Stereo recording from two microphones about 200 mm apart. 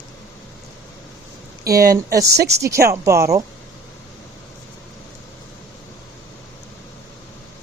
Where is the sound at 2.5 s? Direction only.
15° right (ahead or behind).